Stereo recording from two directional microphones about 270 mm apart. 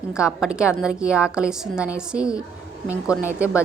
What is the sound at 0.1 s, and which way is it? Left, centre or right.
A woman's voice, centre.